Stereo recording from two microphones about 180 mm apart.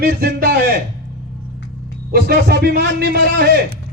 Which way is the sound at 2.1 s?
60° right (ahead or behind).